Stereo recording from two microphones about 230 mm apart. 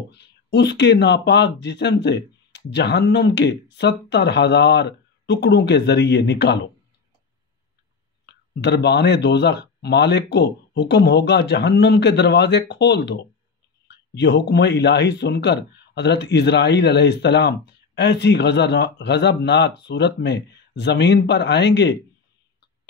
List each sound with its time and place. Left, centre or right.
0.1 s speech: left
8.5 s speech: left